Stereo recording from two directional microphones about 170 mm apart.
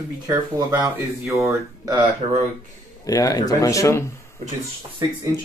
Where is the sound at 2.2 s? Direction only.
30° right (ahead or behind).